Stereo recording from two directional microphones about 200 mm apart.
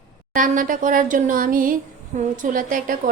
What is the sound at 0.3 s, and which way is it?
Speech, 40° right (ahead or behind).